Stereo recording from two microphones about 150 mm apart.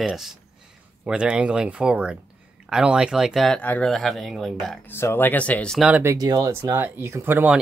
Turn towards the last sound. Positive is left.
turn(degrees=-15)  # may be behind; listen again after turning